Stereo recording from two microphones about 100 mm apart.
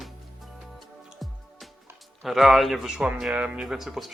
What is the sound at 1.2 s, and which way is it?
Music, centre (ahead or behind).